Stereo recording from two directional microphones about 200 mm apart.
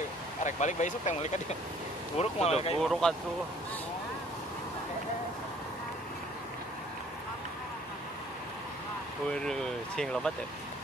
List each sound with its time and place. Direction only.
0.4 s speech: 35° left (ahead or behind)
2.8 s speech: centre (ahead or behind)
9.3 s speech: 5° left (ahead or behind)